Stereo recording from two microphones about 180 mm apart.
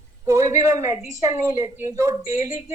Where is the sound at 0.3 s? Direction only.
15° right (ahead or behind).